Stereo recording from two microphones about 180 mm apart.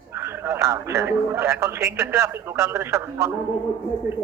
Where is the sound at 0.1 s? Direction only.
15° right (ahead or behind).